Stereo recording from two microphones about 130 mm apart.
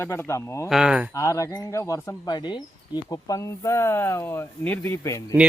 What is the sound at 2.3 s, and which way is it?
Speech, 35° left (ahead or behind).